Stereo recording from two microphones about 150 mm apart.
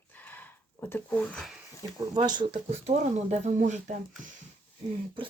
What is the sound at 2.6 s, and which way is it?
Speech, 45° right (ahead or behind).